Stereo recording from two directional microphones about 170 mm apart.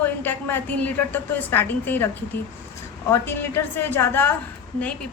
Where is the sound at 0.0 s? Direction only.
10° left (ahead or behind).